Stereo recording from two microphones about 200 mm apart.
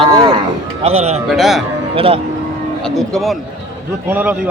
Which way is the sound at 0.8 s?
30° right (ahead or behind).